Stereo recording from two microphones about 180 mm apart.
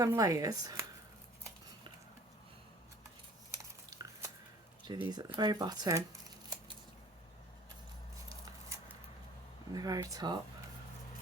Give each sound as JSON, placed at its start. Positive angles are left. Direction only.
{"t": 0.0, "sound": "speech", "side_deg": -20}
{"t": 3.5, "sound": "a sound", "side_deg": -20}
{"t": 4.9, "sound": "speech", "side_deg": -25}
{"t": 9.7, "sound": "speech", "side_deg": -20}